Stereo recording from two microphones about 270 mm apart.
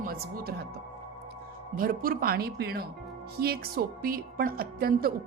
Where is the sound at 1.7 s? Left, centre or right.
Right.